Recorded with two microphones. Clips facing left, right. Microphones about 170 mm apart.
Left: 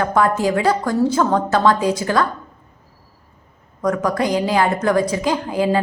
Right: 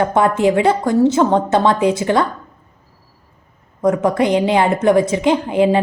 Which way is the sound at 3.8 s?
25° right (ahead or behind).